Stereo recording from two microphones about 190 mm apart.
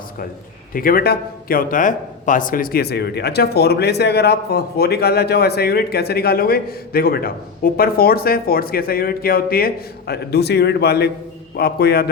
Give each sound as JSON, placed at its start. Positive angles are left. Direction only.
{"t": 0.7, "sound": "speech", "side_deg": 50}